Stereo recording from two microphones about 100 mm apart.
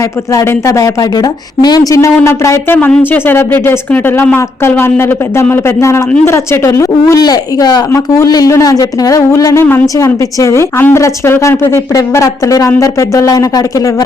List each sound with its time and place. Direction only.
0.3 s speech: 30° left (ahead or behind)
2.7 s speech: 15° left (ahead or behind); by 13.9 s 35° left (ahead or behind)